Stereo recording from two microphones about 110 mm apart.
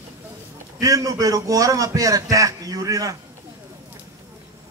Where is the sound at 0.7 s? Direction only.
30° right (ahead or behind).